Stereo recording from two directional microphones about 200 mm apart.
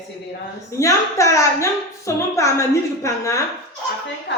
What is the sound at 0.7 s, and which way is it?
A woman's voice, 15° left (ahead or behind).